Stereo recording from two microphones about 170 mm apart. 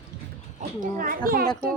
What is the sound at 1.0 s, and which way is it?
Speech, 55° right (ahead or behind).